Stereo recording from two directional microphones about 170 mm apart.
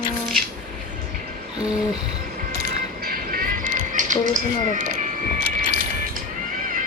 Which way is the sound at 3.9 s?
50° right (ahead or behind).